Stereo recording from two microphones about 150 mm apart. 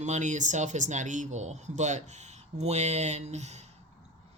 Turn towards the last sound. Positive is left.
turn(degrees=-50)  # may be behind; listen again after turning